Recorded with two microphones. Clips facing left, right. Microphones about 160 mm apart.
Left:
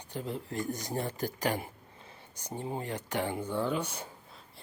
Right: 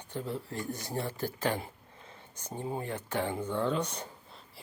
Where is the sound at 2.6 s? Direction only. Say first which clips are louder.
Right 1 dB; 20° left (ahead or behind).